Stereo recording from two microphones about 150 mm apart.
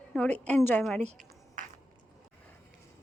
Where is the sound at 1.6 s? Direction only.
60° right (ahead or behind).